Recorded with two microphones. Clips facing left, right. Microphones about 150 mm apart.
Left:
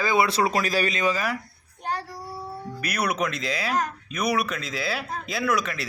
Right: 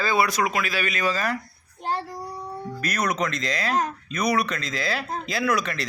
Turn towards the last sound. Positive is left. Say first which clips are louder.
# right 1 dB
turn(degrees=0)  # may be behind; listen again after turning